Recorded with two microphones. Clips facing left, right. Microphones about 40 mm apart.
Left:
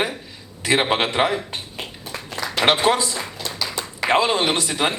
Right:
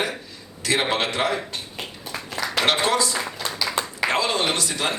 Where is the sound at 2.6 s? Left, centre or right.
Left.